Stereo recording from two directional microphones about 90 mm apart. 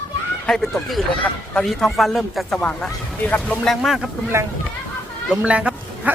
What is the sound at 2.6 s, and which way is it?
A man's voice, 15° left (ahead or behind).